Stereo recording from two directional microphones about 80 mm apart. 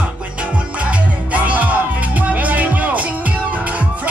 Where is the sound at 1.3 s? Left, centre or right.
Centre.